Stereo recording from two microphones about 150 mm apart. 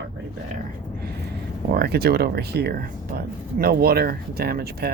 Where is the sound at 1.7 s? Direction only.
90° right.